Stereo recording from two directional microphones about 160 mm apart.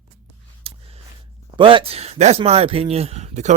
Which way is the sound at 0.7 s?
40° right (ahead or behind).